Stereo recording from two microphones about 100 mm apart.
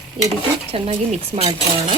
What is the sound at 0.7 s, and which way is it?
Stir, 70° right (ahead or behind).